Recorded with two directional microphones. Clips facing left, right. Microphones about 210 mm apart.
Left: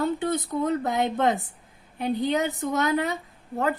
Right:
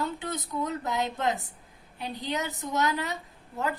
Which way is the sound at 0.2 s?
55° left (ahead or behind).